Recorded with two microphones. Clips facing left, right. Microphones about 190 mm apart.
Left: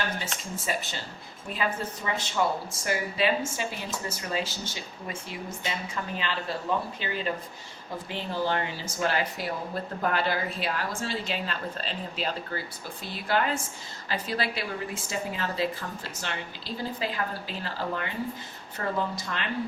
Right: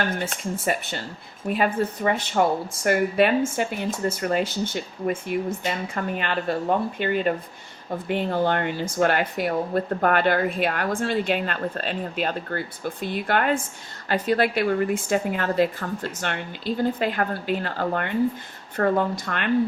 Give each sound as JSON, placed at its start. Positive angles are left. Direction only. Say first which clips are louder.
{"t": 0.2, "sound": "speech", "louder": "right 7 dB", "side_deg": -55}